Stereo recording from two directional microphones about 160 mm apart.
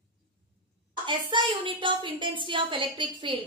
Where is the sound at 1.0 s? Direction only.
30° right (ahead or behind).